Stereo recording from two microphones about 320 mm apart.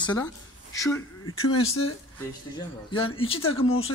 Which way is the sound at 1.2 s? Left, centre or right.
Left.